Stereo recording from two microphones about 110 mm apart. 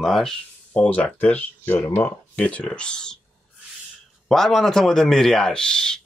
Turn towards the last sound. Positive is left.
turn(degrees=5)  # may be behind; listen again after turning